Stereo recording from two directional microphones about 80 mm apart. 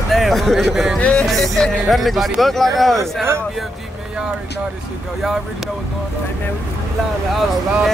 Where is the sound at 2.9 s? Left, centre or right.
Right.